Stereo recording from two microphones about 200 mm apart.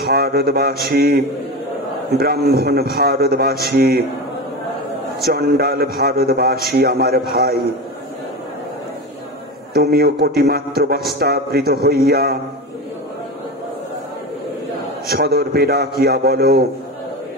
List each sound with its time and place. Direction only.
0.0 s a man's voice: 50° right (ahead or behind)
5.2 s a man's voice: 50° right (ahead or behind)
9.8 s a man's voice: 55° right (ahead or behind)
15.0 s a man's voice: 50° right (ahead or behind)